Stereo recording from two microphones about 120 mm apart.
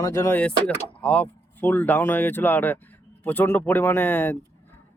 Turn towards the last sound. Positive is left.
turn(degrees=15)  # may be behind; listen again after turning